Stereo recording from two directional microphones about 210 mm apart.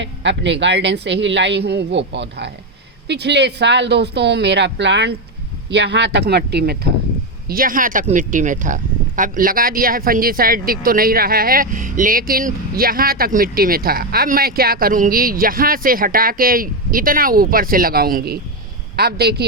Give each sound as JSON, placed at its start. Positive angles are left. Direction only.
{"t": 0.0, "sound": "speech", "side_deg": -60}